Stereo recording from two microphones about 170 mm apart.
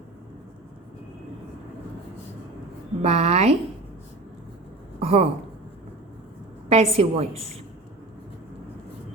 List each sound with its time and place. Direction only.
3.0 s a woman's voice: 40° right (ahead or behind)
4.9 s speech: 35° right (ahead or behind)
6.7 s a woman's voice: 35° right (ahead or behind)